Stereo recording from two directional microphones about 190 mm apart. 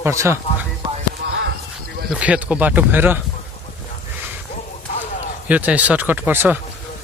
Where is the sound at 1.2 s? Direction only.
60° right (ahead or behind).